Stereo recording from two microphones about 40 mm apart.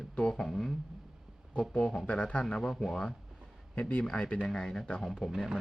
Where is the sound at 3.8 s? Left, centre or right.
Left; by 4.8 s centre.